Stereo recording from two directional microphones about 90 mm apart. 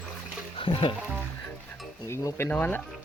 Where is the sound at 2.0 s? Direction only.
30° left (ahead or behind).